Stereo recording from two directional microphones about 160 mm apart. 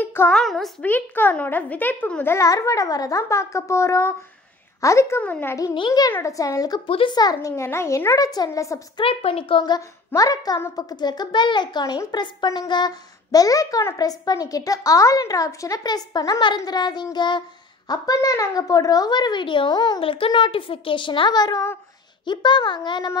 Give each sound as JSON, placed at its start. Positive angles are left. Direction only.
{"t": 0.0, "sound": "a sound", "side_deg": 15}
{"t": 0.3, "sound": "a child's voice", "side_deg": 0}
{"t": 0.8, "sound": "a child's voice", "side_deg": 10}
{"t": 5.8, "sound": "a woman's voice", "side_deg": 25}
{"t": 9.0, "sound": "a woman's voice", "side_deg": 35}
{"t": 9.6, "sound": "a woman's voice", "side_deg": 20}